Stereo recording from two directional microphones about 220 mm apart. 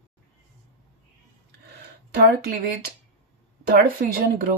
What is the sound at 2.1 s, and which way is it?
Speech, 45° right (ahead or behind).